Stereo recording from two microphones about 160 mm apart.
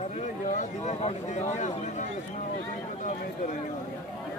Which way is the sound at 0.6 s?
45° left (ahead or behind).